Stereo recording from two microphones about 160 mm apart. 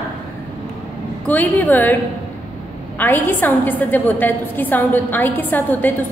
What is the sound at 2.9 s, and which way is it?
A woman's voice, 10° left (ahead or behind).